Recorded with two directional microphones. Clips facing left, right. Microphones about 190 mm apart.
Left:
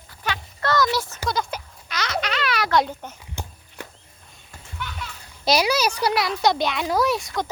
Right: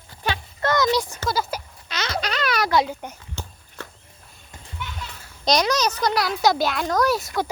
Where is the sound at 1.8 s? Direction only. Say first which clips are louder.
Even; 30° right (ahead or behind).